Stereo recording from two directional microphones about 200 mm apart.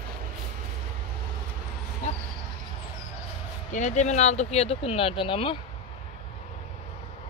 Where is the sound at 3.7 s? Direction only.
35° left (ahead or behind).